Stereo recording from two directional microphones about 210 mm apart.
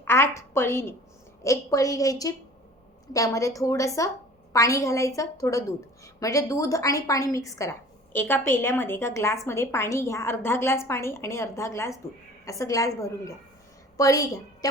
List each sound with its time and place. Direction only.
0.0 s a woman's voice: 10° left (ahead or behind)